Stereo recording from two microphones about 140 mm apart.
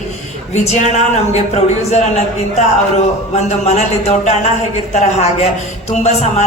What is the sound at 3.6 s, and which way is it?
A man's voice, 50° left (ahead or behind).